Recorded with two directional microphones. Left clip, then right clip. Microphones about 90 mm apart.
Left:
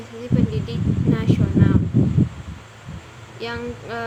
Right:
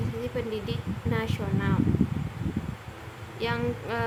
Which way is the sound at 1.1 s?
15° right (ahead or behind).